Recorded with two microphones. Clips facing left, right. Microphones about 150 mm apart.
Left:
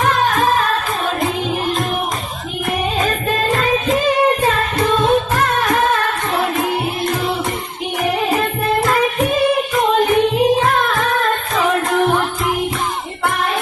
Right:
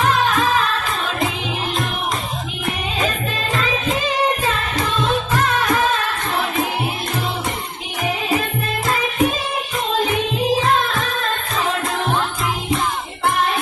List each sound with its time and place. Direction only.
0.0 s music: 50° left (ahead or behind)
3.5 s music: 45° left (ahead or behind)
8.0 s music: 60° left (ahead or behind)